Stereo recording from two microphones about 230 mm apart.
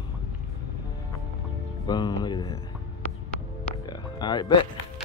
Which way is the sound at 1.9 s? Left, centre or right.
Centre.